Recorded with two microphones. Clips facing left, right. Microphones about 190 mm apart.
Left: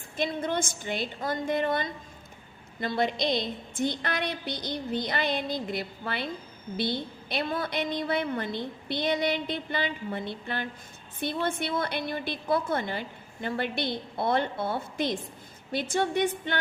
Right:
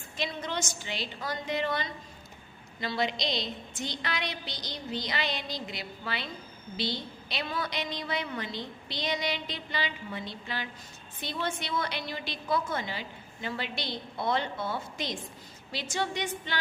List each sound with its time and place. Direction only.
0.2 s a woman's voice: 55° left (ahead or behind)